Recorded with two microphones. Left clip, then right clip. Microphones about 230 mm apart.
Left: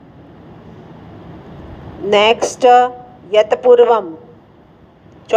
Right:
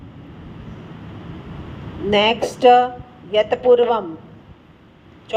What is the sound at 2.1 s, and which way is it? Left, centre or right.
Speech, left.